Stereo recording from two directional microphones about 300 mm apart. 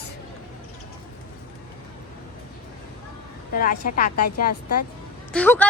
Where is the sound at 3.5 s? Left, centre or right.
Left.